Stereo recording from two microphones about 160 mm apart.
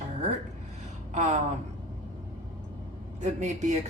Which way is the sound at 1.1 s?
45° right (ahead or behind).